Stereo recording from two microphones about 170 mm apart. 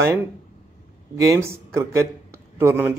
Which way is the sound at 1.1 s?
20° right (ahead or behind).